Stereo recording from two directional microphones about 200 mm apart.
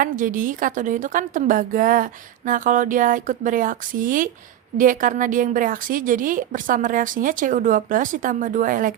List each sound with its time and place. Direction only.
0.0 s a woman's voice: 40° right (ahead or behind)